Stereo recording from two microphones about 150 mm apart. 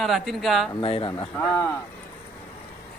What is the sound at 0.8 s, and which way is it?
Speech, 35° left (ahead or behind).